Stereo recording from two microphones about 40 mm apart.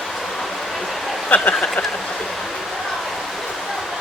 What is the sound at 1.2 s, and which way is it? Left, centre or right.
Speech, left.